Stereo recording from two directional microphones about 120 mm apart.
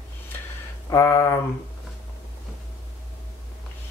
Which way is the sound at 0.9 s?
20° left (ahead or behind).